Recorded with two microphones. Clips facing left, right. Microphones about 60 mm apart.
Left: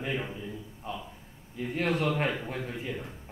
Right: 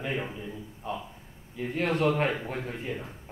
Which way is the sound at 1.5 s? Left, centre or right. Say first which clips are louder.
Right 1 dB; right.